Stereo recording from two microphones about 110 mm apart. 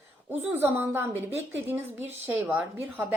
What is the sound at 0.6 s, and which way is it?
Speech, 20° right (ahead or behind).